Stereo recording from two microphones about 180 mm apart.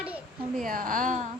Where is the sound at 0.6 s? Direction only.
50° right (ahead or behind).